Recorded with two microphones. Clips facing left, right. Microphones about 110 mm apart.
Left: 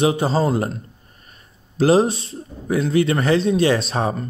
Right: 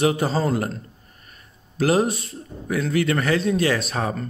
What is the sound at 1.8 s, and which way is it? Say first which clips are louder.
Speech: left 4 dB; 25° left (ahead or behind).